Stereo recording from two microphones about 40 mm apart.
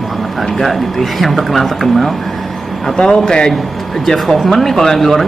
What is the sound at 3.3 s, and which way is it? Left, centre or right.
A man's voice, centre.